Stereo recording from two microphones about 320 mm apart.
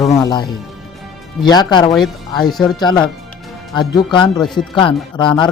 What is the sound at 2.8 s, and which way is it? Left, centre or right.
Speech, centre.